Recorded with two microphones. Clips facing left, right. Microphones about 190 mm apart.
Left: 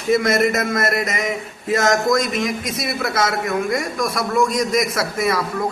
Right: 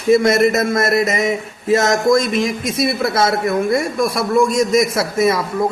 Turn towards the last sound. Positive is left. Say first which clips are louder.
# right 4 dB
turn(degrees=-25)  # may be behind; listen again after turning